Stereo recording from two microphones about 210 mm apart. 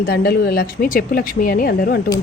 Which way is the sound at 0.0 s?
45° left (ahead or behind).